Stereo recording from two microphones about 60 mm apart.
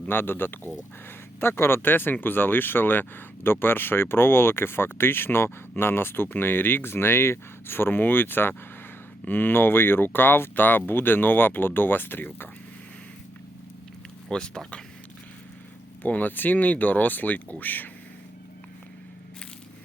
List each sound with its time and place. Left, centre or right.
0.1 s speech: left
14.3 s speech: centre
16.0 s speech: left